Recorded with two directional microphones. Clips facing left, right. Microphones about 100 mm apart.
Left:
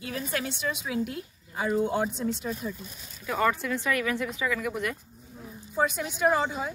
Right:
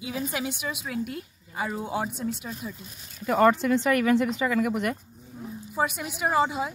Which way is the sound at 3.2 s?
45° right (ahead or behind).